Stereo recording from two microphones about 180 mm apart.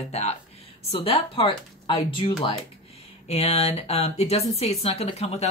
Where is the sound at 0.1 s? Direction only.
35° left (ahead or behind).